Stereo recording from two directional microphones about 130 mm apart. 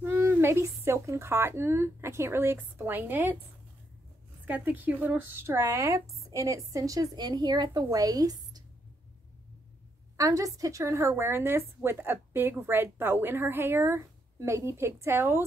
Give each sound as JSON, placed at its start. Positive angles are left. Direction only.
{"t": 0.0, "sound": "speech", "side_deg": -15}
{"t": 4.5, "sound": "a woman's voice", "side_deg": -10}
{"t": 10.1, "sound": "a woman's voice", "side_deg": -25}